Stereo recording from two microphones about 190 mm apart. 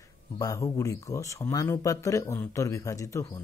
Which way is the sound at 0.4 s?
15° left (ahead or behind).